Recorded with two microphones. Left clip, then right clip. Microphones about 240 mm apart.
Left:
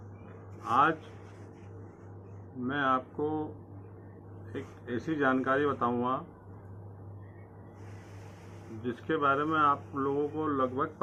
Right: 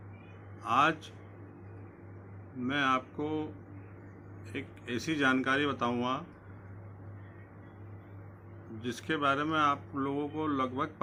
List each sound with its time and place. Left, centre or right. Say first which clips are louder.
0.6 s a sound: left 1 dB; right
2.6 s speech: left 1 dB; right
5.0 s speech: left 1 dB; right
8.8 s speech: left 2 dB; right